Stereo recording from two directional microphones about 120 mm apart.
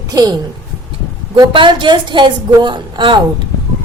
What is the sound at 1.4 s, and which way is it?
A woman's voice, 45° right (ahead or behind).